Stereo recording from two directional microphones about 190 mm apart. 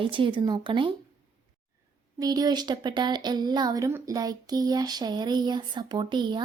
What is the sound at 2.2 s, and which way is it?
Speech, 20° right (ahead or behind).